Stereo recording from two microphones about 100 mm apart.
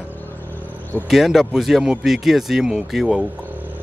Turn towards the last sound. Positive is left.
turn(degrees=-5)  # may be behind; listen again after turning